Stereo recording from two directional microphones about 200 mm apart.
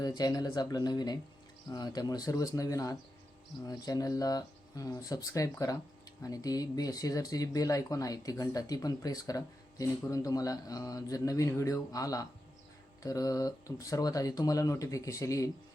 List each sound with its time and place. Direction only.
0.0 s speech: 20° left (ahead or behind)